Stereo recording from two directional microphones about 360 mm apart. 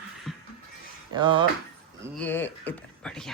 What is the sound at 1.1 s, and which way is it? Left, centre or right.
Speech, centre.